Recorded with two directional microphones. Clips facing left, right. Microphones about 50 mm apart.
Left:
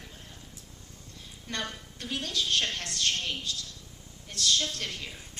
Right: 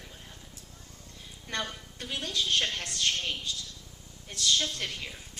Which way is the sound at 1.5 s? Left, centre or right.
Centre.